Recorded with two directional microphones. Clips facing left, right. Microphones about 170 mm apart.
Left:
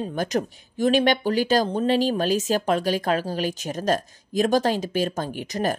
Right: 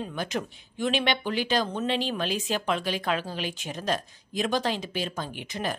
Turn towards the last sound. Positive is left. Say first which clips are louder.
# left 7 dB
turn(degrees=45)  # may be behind; listen again after turning